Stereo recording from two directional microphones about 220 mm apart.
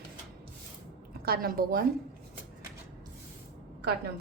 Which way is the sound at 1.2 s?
45° right (ahead or behind).